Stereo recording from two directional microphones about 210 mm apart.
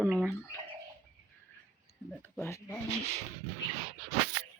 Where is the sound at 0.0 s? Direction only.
5° right (ahead or behind).